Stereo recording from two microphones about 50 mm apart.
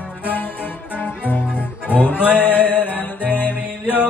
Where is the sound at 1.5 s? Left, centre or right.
Right.